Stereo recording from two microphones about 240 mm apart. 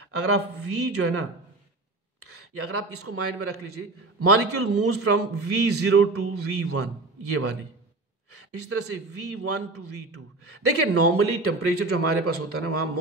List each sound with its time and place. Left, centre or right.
0.0 s a man's voice: right
2.2 s a man's voice: right
8.7 s a man's voice: right